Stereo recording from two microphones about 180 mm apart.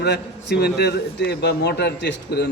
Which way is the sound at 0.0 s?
65° left (ahead or behind).